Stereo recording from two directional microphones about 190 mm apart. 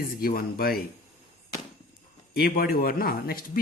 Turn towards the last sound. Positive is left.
turn(degrees=50)  # may be behind; listen again after turning